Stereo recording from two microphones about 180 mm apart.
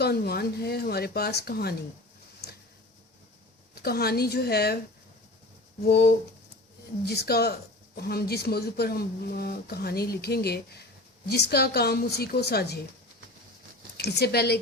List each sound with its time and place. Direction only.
0.0 s speech: 60° left (ahead or behind)
3.8 s speech: 60° left (ahead or behind)
5.9 s speech: 60° left (ahead or behind)
13.9 s speech: 65° left (ahead or behind)